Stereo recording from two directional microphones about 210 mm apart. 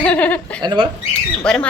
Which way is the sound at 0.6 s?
20° right (ahead or behind).